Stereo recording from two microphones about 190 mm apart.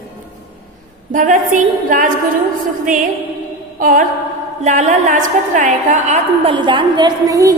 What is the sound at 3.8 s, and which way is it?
A woman's voice, 45° right (ahead or behind).